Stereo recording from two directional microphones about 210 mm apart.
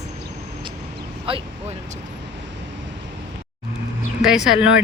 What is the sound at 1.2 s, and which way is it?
Speech, 25° right (ahead or behind).